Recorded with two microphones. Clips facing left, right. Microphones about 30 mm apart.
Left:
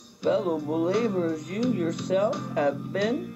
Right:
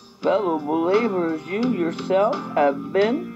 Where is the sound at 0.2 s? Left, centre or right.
Right.